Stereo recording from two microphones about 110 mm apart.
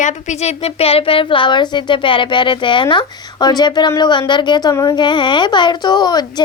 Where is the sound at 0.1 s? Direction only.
85° left.